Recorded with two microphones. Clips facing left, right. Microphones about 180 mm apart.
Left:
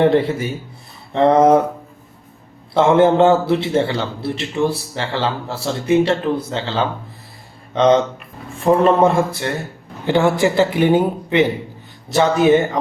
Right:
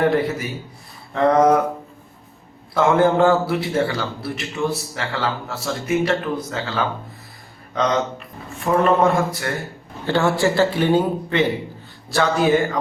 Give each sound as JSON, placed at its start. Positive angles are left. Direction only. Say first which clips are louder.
{"t": 0.0, "sound": "a man's voice", "louder": "left 4 dB", "side_deg": 25}
{"t": 2.7, "sound": "a man's voice", "louder": "left 4 dB", "side_deg": 25}